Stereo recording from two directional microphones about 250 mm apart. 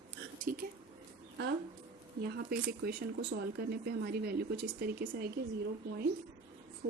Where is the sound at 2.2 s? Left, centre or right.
Right.